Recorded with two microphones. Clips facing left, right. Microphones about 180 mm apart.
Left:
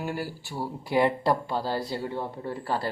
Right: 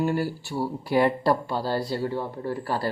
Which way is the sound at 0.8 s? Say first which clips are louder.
Right 2 dB; 20° left (ahead or behind).